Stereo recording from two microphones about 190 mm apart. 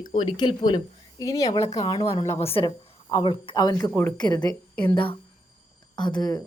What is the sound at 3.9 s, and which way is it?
Speech, 10° left (ahead or behind).